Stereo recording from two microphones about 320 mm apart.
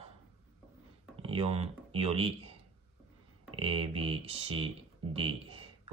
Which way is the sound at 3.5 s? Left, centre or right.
Centre.